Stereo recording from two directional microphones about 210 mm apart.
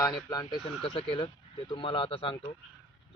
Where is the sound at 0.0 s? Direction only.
20° left (ahead or behind).